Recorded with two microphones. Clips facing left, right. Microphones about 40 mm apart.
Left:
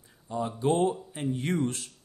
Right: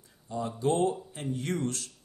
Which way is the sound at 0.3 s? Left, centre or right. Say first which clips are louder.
Left 2 dB; left.